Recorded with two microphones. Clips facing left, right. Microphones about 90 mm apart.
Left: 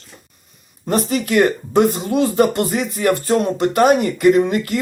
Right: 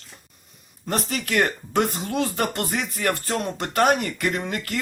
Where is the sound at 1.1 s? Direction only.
15° left (ahead or behind).